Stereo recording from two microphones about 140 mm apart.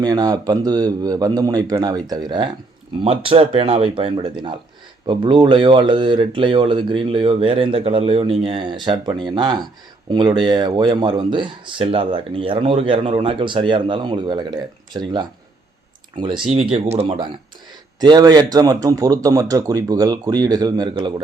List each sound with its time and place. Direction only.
0.0 s a man's voice: 25° right (ahead or behind)
3.0 s speech: 40° right (ahead or behind)
16.7 s speech: 50° right (ahead or behind)
17.1 s a man's voice: 35° right (ahead or behind)